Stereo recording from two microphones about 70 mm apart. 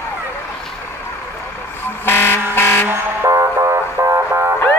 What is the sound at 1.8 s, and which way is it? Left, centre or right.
Air horn, left.